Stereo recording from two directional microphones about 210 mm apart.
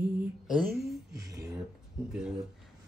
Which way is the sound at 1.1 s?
50° right (ahead or behind).